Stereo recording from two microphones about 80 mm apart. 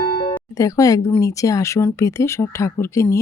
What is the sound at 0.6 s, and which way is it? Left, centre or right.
Speech, left.